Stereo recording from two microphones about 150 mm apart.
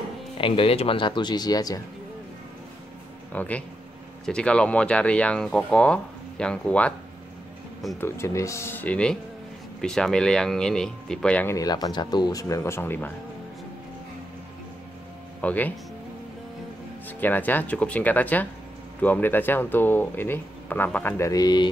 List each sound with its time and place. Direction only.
0.4 s speech: 35° left (ahead or behind)
3.3 s speech: 10° left (ahead or behind)
8.0 s speech: 20° left (ahead or behind)
11.5 s speech: 25° left (ahead or behind)
15.4 s speech: 10° left (ahead or behind)
17.2 s speech: 10° left (ahead or behind)